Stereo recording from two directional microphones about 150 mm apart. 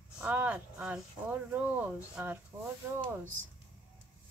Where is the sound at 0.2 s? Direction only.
10° right (ahead or behind).